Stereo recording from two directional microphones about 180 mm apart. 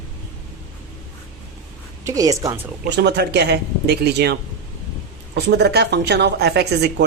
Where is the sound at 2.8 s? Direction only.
70° right (ahead or behind).